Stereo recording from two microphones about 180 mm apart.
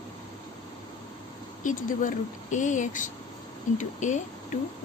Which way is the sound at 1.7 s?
45° left (ahead or behind).